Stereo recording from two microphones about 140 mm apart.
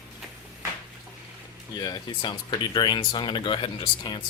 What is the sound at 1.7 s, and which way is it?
Speech, 30° left (ahead or behind).